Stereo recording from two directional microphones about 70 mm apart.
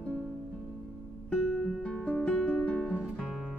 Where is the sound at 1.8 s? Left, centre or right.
Centre.